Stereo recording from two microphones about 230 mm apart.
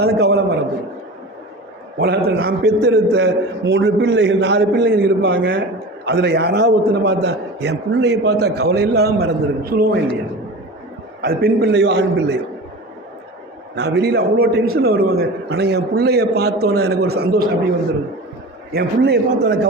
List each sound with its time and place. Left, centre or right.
0.0 s a man's voice: right
2.0 s a man's voice: right
11.2 s a man's voice: right
13.7 s a man's voice: right
18.7 s a man's voice: right